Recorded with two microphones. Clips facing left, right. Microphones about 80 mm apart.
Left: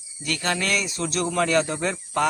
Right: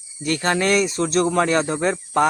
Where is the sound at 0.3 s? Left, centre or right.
Right.